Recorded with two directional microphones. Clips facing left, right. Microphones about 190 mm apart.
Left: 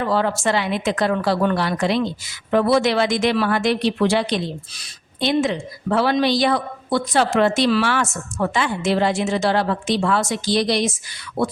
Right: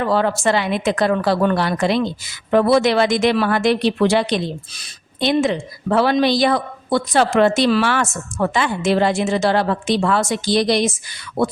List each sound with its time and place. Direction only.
0.1 s a woman's voice: 55° right (ahead or behind)